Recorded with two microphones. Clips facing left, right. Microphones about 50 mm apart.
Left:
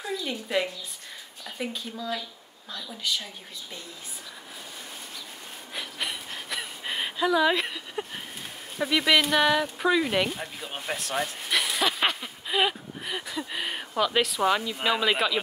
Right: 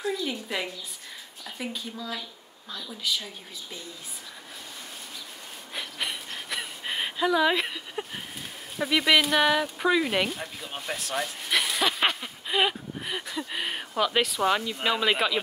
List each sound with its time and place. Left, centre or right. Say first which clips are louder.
0.0 s a woman's voice: right 2 dB; centre
5.8 s a sound: even; centre
8.7 s speech: even; centre